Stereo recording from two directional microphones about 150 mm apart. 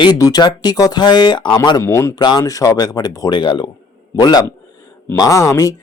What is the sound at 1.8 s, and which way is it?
Speech, 20° left (ahead or behind).